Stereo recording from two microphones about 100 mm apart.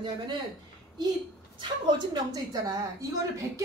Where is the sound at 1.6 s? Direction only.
45° right (ahead or behind).